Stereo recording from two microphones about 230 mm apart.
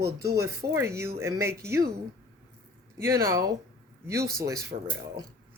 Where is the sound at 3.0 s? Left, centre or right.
Centre.